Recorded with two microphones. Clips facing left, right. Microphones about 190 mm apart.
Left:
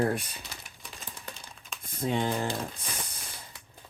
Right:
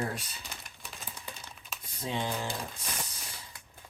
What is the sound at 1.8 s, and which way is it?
Speech, 50° left (ahead or behind).